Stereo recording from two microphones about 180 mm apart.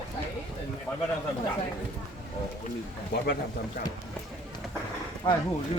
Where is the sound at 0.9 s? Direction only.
15° left (ahead or behind).